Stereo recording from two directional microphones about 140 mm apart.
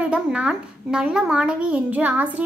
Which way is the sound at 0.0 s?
10° right (ahead or behind).